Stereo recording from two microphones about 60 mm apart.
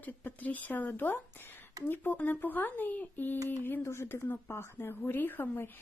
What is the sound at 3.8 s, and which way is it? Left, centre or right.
A woman's voice, left.